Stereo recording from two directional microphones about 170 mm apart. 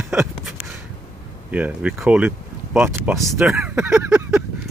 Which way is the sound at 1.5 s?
10° right (ahead or behind).